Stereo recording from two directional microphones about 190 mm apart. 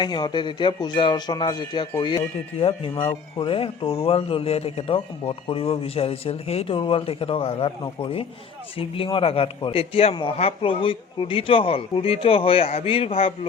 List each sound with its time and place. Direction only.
0.0 s a man's voice: 25° left (ahead or behind)